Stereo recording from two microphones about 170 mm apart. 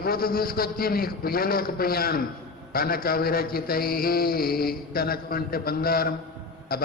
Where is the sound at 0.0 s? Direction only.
60° left (ahead or behind).